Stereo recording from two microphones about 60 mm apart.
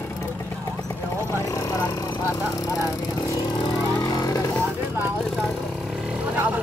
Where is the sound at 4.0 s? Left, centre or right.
Left.